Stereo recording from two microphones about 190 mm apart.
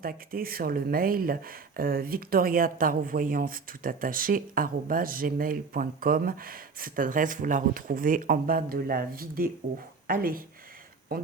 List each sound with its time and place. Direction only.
0.0 s speech: 50° right (ahead or behind)